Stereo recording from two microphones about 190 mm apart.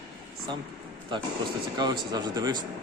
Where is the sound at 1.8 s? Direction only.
20° right (ahead or behind).